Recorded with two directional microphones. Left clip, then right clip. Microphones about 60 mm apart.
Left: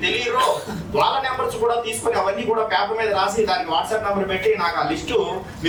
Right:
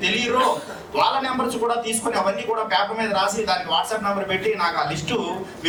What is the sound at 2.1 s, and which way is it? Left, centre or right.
A man's voice, centre.